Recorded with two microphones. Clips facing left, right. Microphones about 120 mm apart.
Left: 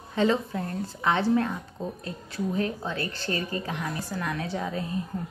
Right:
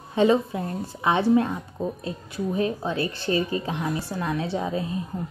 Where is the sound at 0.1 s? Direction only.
15° right (ahead or behind).